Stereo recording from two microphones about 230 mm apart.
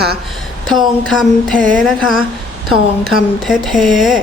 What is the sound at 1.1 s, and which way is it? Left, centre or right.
Speech, centre.